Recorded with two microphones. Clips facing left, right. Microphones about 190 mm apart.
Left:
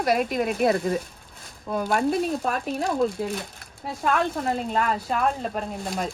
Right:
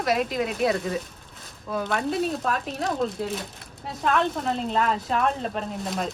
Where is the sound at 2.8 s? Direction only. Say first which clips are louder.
Left 2 dB; centre (ahead or behind).